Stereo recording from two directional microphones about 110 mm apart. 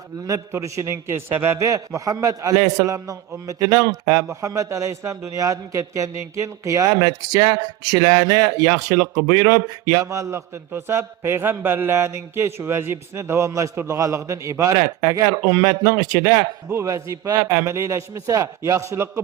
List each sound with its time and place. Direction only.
0.3 s a man's voice: 30° right (ahead or behind)